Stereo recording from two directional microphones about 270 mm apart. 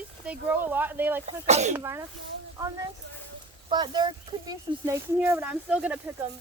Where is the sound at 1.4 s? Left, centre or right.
Right.